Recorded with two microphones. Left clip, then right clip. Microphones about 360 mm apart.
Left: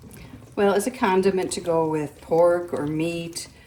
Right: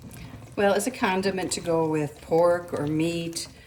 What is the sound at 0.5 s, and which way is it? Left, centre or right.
Speech, centre.